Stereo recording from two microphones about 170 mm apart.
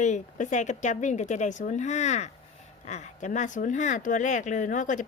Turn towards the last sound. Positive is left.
turn(degrees=50)  # may be behind; listen again after turning